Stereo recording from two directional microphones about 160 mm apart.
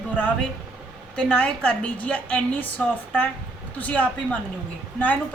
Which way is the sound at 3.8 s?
10° left (ahead or behind).